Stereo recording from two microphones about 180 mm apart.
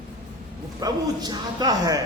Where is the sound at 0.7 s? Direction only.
20° right (ahead or behind).